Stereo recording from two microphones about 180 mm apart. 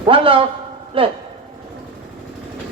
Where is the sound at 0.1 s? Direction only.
30° right (ahead or behind).